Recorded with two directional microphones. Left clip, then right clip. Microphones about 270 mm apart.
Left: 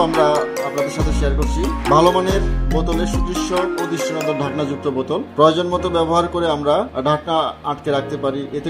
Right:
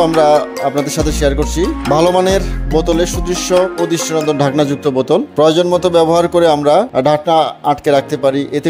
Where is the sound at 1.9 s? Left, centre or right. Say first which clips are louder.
Right 2 dB; right.